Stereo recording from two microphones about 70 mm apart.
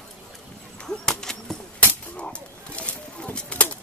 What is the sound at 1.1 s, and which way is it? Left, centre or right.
Bird, centre.